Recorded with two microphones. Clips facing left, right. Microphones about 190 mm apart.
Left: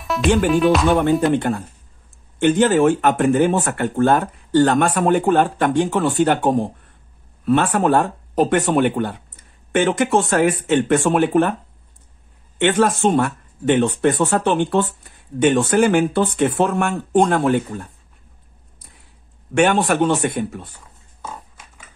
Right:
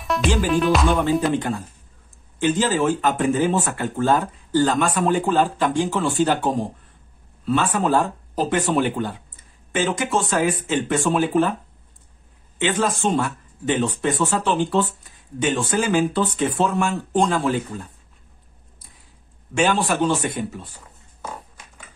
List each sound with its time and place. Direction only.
0.0 s music: centre (ahead or behind)
1.3 s speech: 60° left (ahead or behind)
12.5 s speech: 65° left (ahead or behind)
19.5 s speech: 60° left (ahead or behind)